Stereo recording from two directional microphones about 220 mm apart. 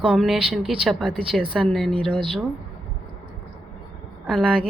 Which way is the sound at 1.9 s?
25° right (ahead or behind).